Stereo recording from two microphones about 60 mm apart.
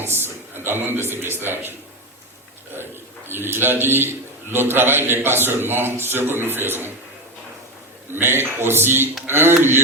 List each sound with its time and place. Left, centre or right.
0.0 s a man's voice: right
3.2 s a man's voice: right
8.1 s a man's voice: right